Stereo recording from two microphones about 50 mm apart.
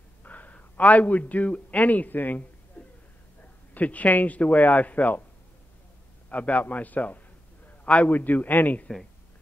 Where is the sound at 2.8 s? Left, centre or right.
Left.